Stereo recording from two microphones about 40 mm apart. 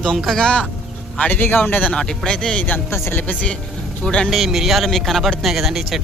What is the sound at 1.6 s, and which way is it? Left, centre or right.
Speech, left.